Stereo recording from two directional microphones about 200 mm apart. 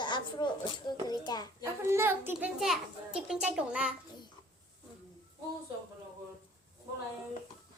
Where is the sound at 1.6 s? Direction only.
10° right (ahead or behind).